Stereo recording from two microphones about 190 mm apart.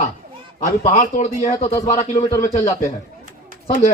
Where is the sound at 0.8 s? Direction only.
40° left (ahead or behind).